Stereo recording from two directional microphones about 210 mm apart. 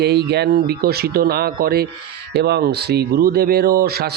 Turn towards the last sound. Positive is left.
turn(degrees=-45)  # may be behind; listen again after turning